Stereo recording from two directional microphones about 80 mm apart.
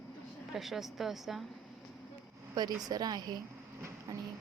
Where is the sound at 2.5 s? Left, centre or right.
Right.